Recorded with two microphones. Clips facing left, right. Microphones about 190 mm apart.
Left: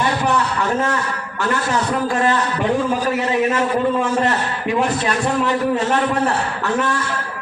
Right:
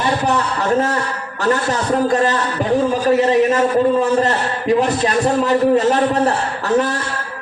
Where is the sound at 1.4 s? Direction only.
35° right (ahead or behind).